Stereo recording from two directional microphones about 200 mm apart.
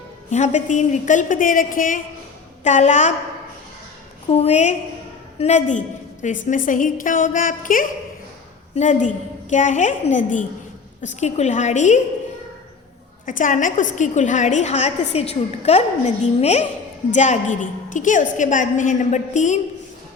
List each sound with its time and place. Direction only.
0.3 s a woman's voice: 35° left (ahead or behind)
4.3 s a woman's voice: 30° left (ahead or behind)
13.2 s a woman's voice: 40° left (ahead or behind)